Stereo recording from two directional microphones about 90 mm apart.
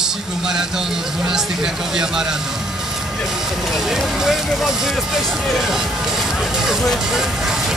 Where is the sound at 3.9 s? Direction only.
5° right (ahead or behind).